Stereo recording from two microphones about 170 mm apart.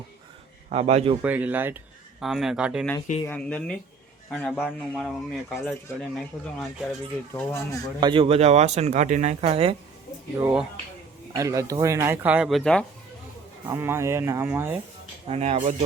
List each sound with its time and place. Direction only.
0.7 s speech: 40° right (ahead or behind)
1.2 s speech: 10° right (ahead or behind)
3.2 s speech: 10° left (ahead or behind)
7.3 s speech: 15° left (ahead or behind)
8.0 s speech: 30° right (ahead or behind)
10.4 s speech: 5° right (ahead or behind)
11.3 s speech: 20° right (ahead or behind); by 12.8 s centre (ahead or behind)
13.7 s speech: 15° right (ahead or behind)
15.3 s speech: 40° right (ahead or behind)